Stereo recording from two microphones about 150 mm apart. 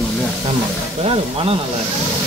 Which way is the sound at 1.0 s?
40° right (ahead or behind).